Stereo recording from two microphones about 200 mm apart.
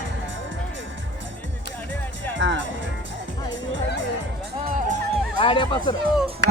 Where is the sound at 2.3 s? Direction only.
65° right (ahead or behind).